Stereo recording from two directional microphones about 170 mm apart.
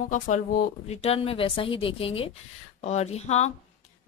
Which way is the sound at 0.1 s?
45° left (ahead or behind).